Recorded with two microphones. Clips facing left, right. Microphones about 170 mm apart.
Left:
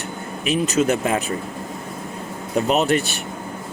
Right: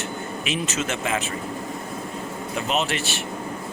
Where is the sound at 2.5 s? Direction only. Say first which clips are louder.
Left 6 dB; 40° left (ahead or behind).